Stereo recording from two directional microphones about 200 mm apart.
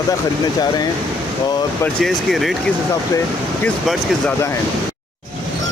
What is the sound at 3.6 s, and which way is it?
Speech, 5° left (ahead or behind).